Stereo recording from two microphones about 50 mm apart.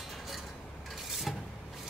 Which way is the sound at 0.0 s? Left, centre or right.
Centre.